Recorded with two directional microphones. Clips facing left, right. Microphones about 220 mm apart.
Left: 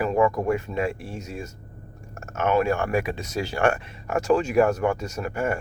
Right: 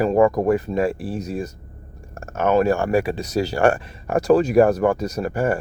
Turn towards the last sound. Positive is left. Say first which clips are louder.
# right 5 dB
turn(degrees=-35)  # may be behind; listen again after turning